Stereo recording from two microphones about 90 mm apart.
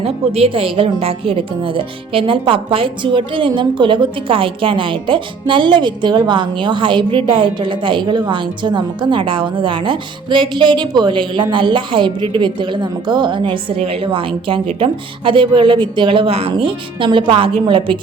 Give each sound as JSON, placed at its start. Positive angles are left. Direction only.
{"t": 0.0, "sound": "a woman's voice", "side_deg": -90}